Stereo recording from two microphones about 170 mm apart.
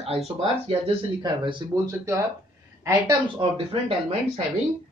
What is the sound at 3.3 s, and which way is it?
Speech, 35° right (ahead or behind).